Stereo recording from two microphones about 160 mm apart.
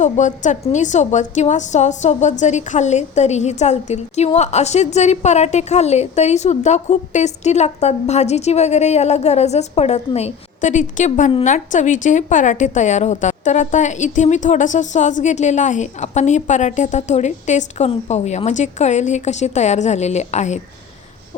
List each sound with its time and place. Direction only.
0.0 s a woman's voice: 50° left (ahead or behind)